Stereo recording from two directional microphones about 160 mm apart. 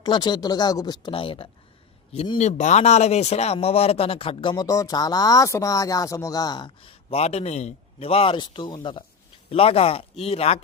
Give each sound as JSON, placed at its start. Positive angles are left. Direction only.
{"t": 0.0, "sound": "speech", "side_deg": 25}
{"t": 2.4, "sound": "speech", "side_deg": 45}